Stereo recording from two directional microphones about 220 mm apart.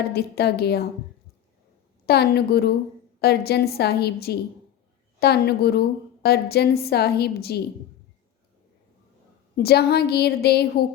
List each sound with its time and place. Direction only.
0.1 s a woman's voice: 45° left (ahead or behind)
2.0 s a woman's voice: 45° left (ahead or behind)
9.6 s a woman's voice: 45° left (ahead or behind)